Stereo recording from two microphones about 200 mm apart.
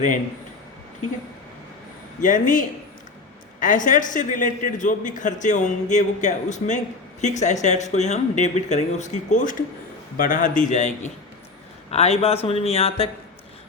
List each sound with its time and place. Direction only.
2.2 s a man's voice: 40° left (ahead or behind)